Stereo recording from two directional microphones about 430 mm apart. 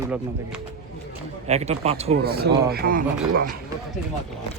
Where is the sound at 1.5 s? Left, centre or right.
Centre.